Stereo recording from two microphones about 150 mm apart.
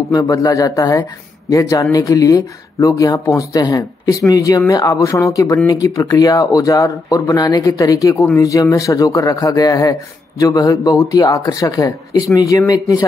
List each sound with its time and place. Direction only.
0.1 s speech: 20° left (ahead or behind)